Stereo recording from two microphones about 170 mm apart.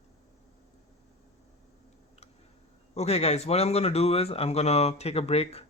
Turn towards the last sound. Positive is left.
turn(degrees=35)  # may be behind; listen again after turning